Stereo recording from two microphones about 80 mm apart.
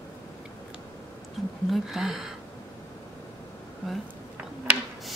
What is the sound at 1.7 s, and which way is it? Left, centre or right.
Speech, centre.